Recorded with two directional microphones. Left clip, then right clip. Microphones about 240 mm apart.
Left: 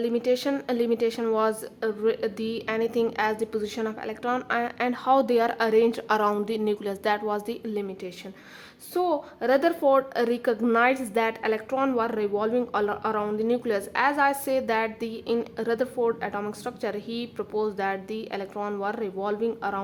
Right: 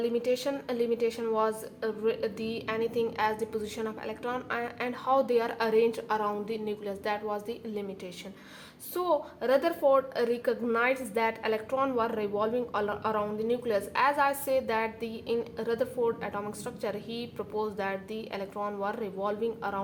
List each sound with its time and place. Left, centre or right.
0.0 s a woman's voice: left